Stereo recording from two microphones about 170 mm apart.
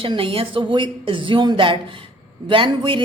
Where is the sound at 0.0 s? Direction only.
30° right (ahead or behind).